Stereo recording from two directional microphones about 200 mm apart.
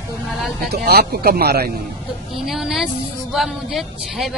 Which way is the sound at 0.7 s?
50° right (ahead or behind).